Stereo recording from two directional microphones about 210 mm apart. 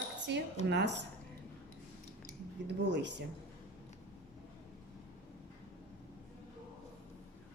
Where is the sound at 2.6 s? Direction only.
60° right (ahead or behind).